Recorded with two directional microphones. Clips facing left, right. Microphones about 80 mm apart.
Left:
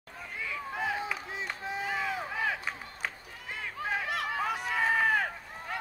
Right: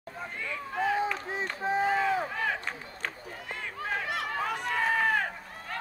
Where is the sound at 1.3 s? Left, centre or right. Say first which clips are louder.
Right 6 dB; right.